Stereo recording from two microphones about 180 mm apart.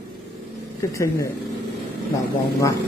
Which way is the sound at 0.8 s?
15° left (ahead or behind).